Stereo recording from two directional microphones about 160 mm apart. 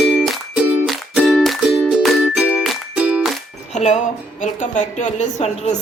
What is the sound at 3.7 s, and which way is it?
Music, 45° left (ahead or behind).